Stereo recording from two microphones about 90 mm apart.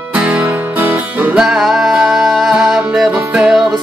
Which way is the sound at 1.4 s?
5° right (ahead or behind).